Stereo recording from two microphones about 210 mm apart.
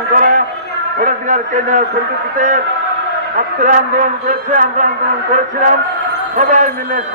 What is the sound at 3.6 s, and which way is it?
A man's voice, 35° right (ahead or behind).